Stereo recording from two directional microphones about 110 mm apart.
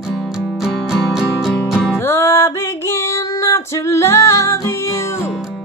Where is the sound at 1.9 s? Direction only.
20° left (ahead or behind).